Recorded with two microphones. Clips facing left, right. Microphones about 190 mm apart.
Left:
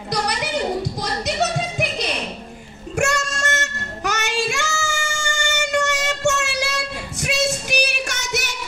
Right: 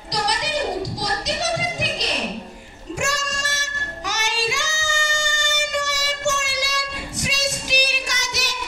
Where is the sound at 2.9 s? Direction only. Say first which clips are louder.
Left 4 dB; 55° left (ahead or behind).